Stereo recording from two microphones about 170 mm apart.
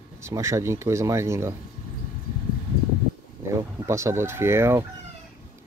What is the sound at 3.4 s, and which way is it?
Speech, 15° right (ahead or behind).